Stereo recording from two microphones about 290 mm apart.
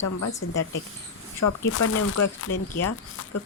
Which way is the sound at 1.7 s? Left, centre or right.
Left.